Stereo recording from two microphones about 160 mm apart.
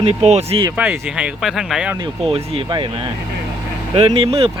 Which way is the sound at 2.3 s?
30° right (ahead or behind).